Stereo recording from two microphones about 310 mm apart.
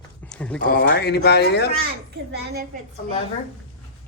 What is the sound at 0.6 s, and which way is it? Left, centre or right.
Speech, left.